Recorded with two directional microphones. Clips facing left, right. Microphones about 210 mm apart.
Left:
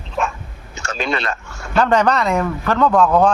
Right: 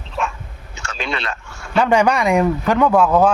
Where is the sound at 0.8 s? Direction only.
45° left (ahead or behind).